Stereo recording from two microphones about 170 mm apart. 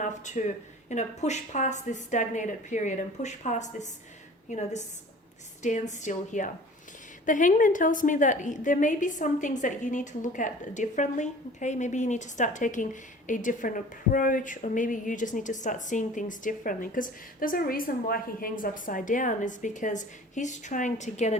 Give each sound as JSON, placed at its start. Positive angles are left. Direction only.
{"t": 0.0, "sound": "a woman's voice", "side_deg": 45}